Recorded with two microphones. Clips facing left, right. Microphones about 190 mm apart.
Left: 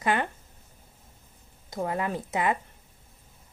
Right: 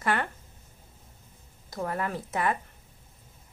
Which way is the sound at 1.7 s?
20° left (ahead or behind).